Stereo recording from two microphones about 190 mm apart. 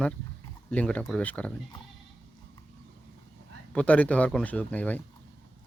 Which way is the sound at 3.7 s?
5° left (ahead or behind).